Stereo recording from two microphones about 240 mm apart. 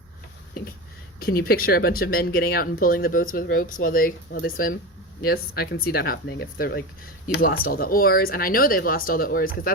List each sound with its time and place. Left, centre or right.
1.2 s speech: left